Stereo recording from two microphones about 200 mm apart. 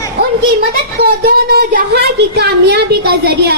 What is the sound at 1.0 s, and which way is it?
A woman's voice, 50° right (ahead or behind).